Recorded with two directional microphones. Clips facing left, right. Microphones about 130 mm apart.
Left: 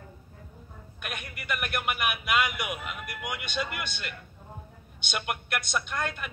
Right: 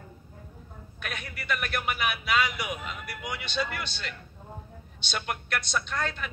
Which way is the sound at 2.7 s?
5° left (ahead or behind).